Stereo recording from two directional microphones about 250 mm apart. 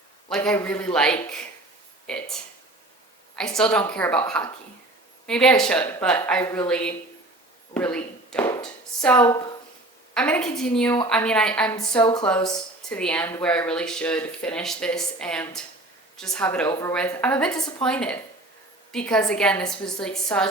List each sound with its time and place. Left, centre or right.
0.3 s speech: centre
5.2 s speech: centre
6.4 s speech: centre
6.7 s a woman's voice: centre